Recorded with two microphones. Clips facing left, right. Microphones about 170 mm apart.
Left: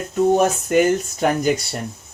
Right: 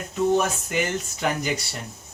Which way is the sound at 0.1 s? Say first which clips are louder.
Left 5 dB; 50° left (ahead or behind).